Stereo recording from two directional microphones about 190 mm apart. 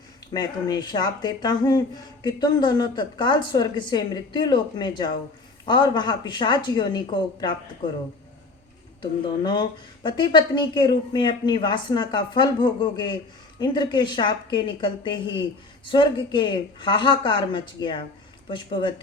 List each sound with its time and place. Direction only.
0.3 s speech: 20° left (ahead or behind)
9.0 s speech: 25° left (ahead or behind)